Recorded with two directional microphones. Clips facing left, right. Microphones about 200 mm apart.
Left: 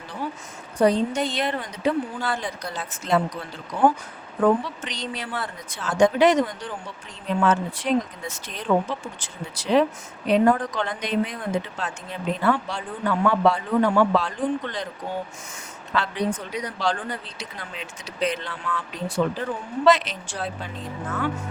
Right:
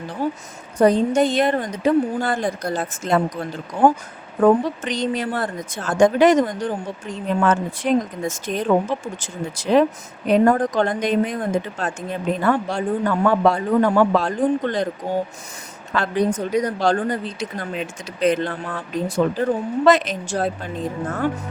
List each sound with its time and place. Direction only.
0.2 s a sound: 45° right (ahead or behind)
0.8 s a woman's voice: 50° right (ahead or behind)
4.4 s a woman's voice: 45° right (ahead or behind)
15.9 s a woman's voice: 45° right (ahead or behind)